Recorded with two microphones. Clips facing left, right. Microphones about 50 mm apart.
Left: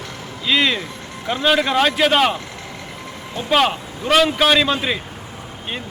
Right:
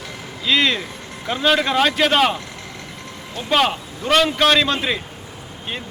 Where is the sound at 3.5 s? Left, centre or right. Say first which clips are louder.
Left 1 dB; centre.